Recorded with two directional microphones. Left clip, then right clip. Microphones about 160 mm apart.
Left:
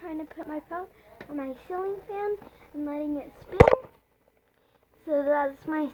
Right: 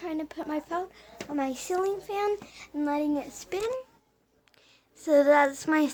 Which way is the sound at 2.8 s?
25° right (ahead or behind).